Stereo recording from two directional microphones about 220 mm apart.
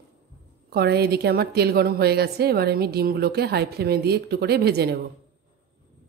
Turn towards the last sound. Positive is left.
turn(degrees=-45)  # may be behind; listen again after turning